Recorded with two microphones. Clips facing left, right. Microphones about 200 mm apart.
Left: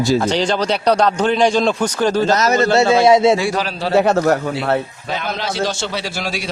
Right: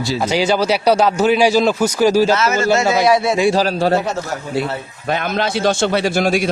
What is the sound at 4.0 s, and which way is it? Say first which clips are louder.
Speech: left 8 dB; 60° left (ahead or behind).